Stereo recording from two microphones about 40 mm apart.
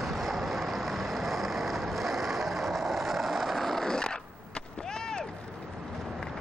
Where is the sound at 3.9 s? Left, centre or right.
Centre.